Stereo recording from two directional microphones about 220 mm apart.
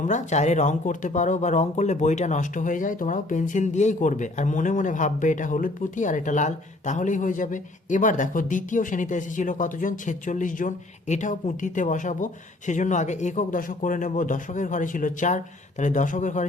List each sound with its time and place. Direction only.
0.0 s speech: 35° left (ahead or behind)